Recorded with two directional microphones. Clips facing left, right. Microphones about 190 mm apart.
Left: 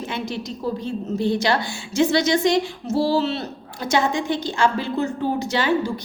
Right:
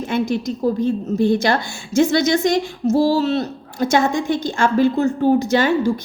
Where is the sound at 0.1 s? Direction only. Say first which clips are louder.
Right 8 dB; 45° right (ahead or behind).